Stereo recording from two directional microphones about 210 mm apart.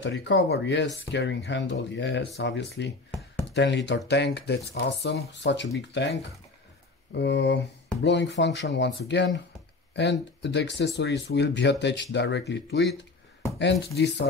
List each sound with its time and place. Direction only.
0.0 s speech: 55° left (ahead or behind)
3.1 s a sound: 5° left (ahead or behind)
3.4 s speech: 55° left (ahead or behind)
7.2 s speech: 55° left (ahead or behind)
10.4 s speech: 55° left (ahead or behind)